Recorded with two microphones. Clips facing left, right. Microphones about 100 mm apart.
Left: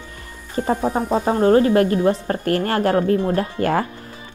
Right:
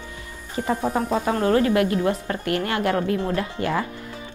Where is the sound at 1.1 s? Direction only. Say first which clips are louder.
Left 6 dB; 30° left (ahead or behind); by 3.8 s 50° left (ahead or behind).